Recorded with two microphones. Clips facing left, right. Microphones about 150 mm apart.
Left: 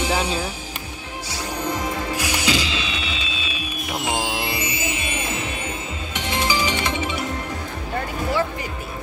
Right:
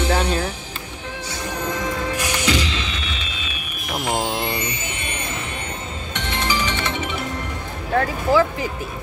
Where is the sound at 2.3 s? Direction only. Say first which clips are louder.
Right 1 dB; 10° left (ahead or behind).